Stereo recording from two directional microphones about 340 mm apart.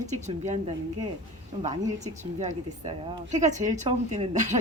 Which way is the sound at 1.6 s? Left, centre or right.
Centre.